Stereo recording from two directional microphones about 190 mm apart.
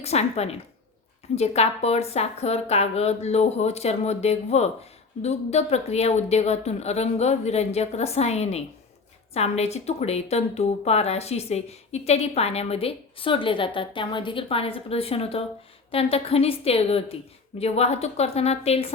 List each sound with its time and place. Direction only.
0.0 s a woman's voice: 35° left (ahead or behind)